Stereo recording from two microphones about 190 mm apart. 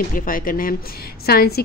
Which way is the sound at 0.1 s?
45° left (ahead or behind).